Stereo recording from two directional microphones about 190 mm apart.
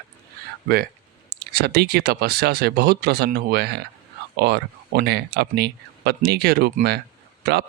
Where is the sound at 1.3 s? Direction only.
55° right (ahead or behind).